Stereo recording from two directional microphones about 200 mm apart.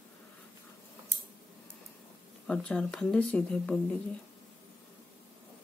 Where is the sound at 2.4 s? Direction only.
5° left (ahead or behind).